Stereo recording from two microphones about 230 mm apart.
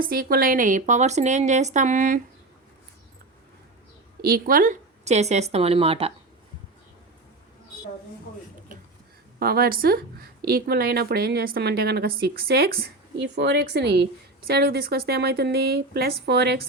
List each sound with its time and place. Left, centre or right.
0.0 s a woman's voice: right
4.3 s speech: right
9.4 s a woman's voice: right